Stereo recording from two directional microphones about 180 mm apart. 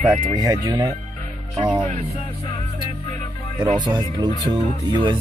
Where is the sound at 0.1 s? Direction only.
20° right (ahead or behind).